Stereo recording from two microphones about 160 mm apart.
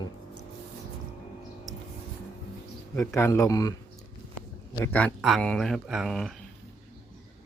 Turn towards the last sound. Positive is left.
turn(degrees=0)  # may be behind; listen again after turning